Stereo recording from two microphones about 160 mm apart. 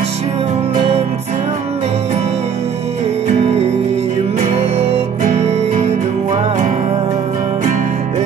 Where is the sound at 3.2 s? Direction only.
45° right (ahead or behind).